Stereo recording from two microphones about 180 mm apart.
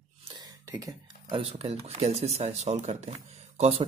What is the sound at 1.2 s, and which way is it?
Speech, 30° right (ahead or behind).